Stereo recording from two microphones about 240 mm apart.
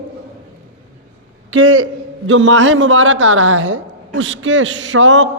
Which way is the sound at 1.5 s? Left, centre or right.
Right.